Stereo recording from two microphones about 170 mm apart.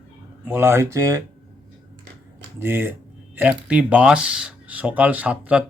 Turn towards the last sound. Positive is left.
turn(degrees=-5)  # may be behind; listen again after turning